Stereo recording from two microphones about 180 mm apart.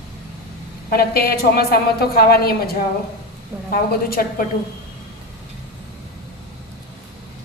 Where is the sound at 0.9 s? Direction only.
55° left (ahead or behind).